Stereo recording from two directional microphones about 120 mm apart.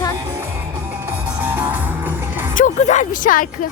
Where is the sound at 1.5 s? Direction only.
15° right (ahead or behind).